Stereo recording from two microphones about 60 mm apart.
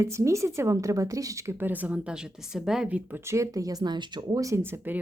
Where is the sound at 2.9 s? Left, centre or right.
Right.